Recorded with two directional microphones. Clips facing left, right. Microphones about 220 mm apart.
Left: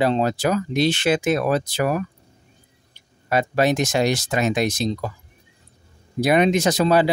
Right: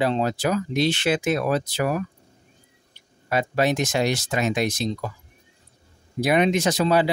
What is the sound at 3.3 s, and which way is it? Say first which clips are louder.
Speech: left 3 dB; 40° left (ahead or behind).